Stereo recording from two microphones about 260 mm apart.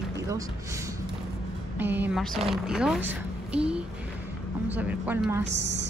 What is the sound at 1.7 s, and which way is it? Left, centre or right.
A woman's voice, centre.